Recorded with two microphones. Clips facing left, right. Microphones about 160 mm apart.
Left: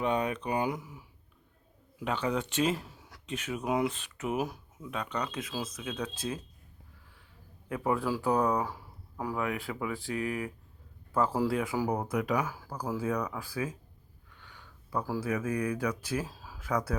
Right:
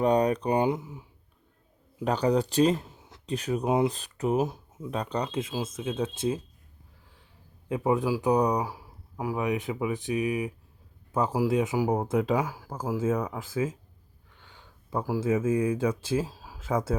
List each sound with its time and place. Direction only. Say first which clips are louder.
0.0 s speech: right 7 dB; 40° right (ahead or behind)
2.0 s speech: right 7 dB; 40° right (ahead or behind)
2.9 s a sound: right 2 dB; 20° right (ahead or behind)
3.2 s speech: right 6 dB; 35° right (ahead or behind)
7.7 s speech: right 4 dB; 20° right (ahead or behind)
12.5 s speech: right 3 dB; 15° right (ahead or behind)
16.2 s speech: right 5 dB; 15° right (ahead or behind)